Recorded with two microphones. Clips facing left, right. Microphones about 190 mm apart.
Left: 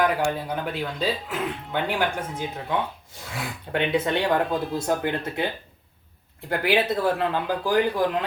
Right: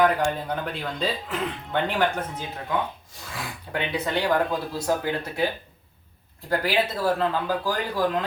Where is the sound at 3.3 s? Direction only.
25° left (ahead or behind).